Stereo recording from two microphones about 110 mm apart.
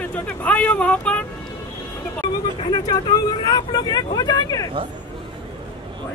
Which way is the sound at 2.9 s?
40° left (ahead or behind).